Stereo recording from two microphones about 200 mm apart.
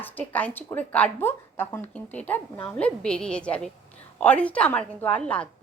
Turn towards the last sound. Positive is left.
turn(degrees=5)  # may be behind; listen again after turning